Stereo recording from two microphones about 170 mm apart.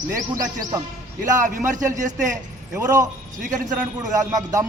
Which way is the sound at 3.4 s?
45° right (ahead or behind).